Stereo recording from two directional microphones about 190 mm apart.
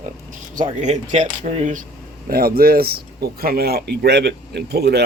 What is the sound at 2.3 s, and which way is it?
Speech, 50° right (ahead or behind).